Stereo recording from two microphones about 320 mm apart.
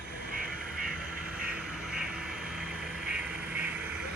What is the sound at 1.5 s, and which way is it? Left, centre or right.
Vehicle, centre.